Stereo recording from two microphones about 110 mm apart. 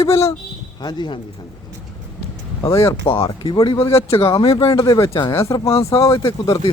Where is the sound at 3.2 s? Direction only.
55° left (ahead or behind).